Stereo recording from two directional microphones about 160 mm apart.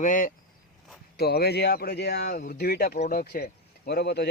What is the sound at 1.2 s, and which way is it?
Speech, 85° left.